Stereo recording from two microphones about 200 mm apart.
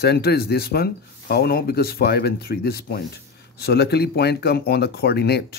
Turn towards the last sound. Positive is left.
turn(degrees=55)  # may be behind; listen again after turning